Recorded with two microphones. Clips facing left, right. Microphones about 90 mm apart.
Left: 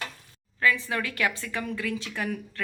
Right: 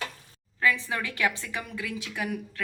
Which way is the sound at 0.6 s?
20° right (ahead or behind).